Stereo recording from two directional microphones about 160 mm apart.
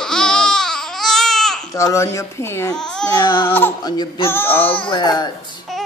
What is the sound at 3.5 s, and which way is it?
Speech, 15° left (ahead or behind).